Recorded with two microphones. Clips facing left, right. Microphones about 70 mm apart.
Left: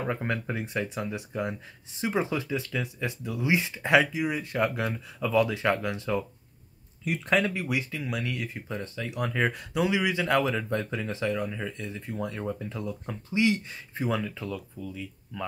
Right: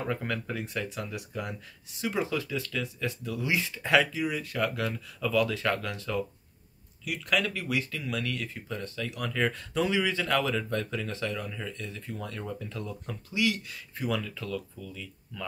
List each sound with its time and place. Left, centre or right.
0.0 s speech: left